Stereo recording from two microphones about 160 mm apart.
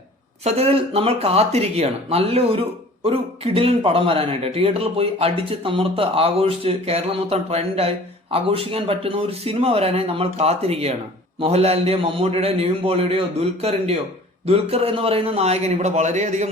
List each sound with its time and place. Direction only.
0.4 s speech: 40° right (ahead or behind)